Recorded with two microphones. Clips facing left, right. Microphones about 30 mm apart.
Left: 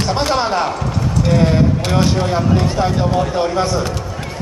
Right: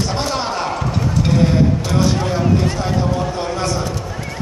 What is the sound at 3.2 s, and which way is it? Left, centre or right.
Speech, left.